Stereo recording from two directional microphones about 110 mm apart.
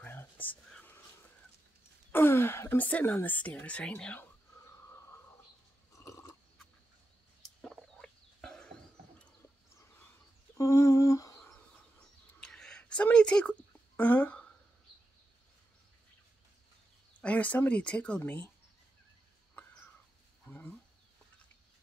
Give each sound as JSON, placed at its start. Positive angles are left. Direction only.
{"t": 0.0, "sound": "whispering", "side_deg": 20}
{"t": 2.1, "sound": "speech", "side_deg": 20}
{"t": 5.9, "sound": "chewing", "side_deg": 30}
{"t": 7.6, "sound": "chicken", "side_deg": 5}
{"t": 10.6, "sound": "humming", "side_deg": 30}
{"t": 12.4, "sound": "a sound", "side_deg": 5}
{"t": 17.2, "sound": "speech", "side_deg": 10}
{"t": 20.4, "sound": "wild animals", "side_deg": 15}